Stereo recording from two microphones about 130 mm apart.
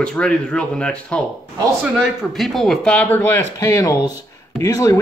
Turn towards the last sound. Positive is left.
turn(degrees=25)  # may be behind; listen again after turning